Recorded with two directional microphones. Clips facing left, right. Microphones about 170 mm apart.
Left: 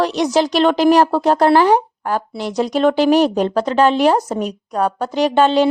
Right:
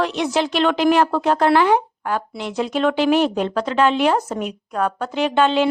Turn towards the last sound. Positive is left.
turn(degrees=35)  # may be behind; listen again after turning